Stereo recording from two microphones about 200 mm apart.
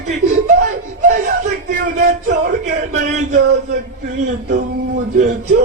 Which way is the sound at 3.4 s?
55° right (ahead or behind).